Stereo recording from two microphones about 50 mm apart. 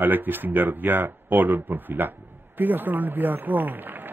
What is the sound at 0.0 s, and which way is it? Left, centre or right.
A man's voice, right.